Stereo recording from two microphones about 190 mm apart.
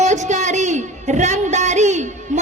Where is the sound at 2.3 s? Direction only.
40° right (ahead or behind).